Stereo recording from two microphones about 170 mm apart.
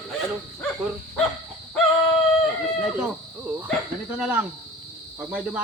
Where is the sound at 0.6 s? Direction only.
5° left (ahead or behind).